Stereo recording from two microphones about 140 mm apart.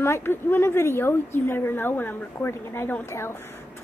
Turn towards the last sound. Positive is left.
turn(degrees=20)  # may be behind; listen again after turning